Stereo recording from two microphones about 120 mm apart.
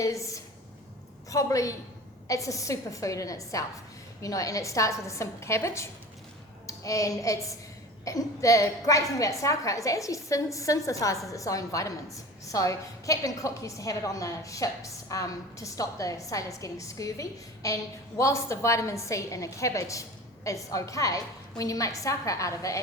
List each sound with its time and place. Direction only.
0.0 s a woman's voice: 25° left (ahead or behind)